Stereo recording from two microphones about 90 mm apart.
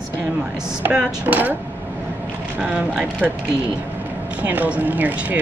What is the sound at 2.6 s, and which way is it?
Speech, 15° right (ahead or behind).